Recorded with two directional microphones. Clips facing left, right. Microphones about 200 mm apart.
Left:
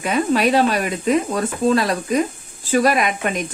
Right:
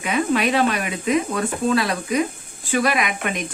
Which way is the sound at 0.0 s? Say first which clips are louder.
Left 3 dB; 40° left (ahead or behind).